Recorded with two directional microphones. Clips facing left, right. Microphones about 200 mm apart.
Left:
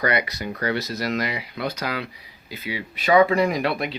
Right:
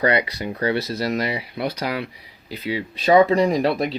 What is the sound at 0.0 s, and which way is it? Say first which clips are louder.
Speech: right 3 dB; 30° right (ahead or behind).